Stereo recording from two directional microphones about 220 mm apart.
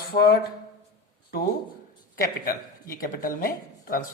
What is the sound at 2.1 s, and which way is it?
Speech, 40° left (ahead or behind).